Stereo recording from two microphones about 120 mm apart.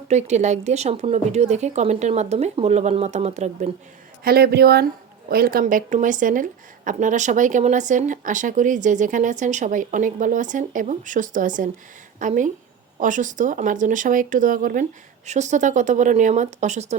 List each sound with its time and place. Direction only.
0.1 s speech: 70° right (ahead or behind)
5.6 s speech: 90° right
15.3 s speech: 75° right (ahead or behind)